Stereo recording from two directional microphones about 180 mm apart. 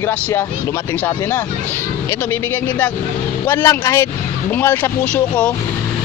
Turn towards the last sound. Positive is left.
turn(degrees=10)  # may be behind; listen again after turning